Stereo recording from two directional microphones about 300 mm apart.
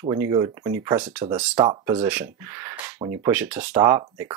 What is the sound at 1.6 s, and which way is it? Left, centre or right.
Speech, centre.